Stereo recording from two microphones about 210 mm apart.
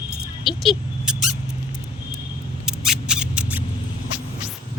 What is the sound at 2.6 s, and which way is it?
Mouse, centre (ahead or behind).